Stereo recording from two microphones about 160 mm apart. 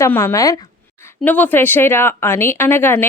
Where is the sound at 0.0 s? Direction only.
15° left (ahead or behind).